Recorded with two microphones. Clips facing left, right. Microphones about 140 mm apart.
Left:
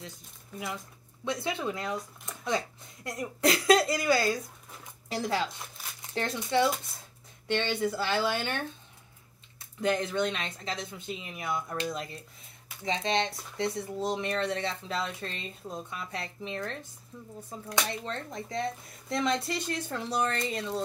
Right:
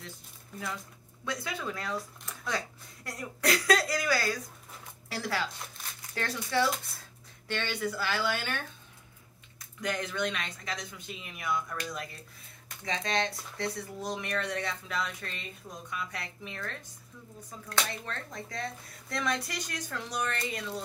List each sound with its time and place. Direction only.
1.2 s speech: 25° left (ahead or behind)